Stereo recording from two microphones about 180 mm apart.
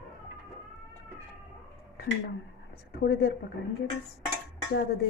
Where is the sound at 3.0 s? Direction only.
65° left (ahead or behind).